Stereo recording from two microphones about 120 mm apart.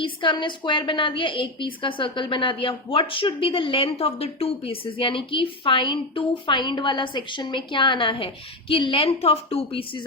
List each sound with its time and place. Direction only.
0.0 s a woman's voice: 45° left (ahead or behind)